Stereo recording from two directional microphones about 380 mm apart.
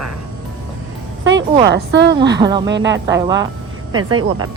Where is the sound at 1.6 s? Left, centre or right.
Right.